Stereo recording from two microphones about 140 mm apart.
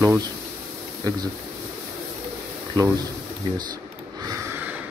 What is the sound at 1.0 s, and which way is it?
Speech, 30° right (ahead or behind).